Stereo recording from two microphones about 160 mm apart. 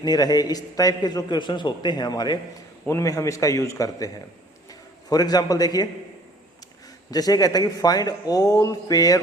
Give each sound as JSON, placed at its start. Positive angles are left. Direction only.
{"t": 0.0, "sound": "a man's voice", "side_deg": 25}
{"t": 7.1, "sound": "a man's voice", "side_deg": 25}